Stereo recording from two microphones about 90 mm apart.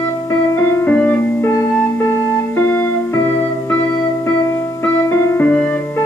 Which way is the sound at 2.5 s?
25° left (ahead or behind).